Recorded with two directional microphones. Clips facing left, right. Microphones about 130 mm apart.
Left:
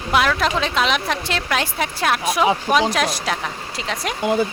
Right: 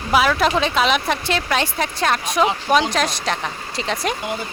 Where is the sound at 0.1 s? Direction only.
5° right (ahead or behind).